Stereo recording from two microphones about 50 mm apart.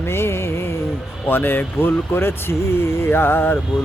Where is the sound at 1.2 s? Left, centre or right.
Left.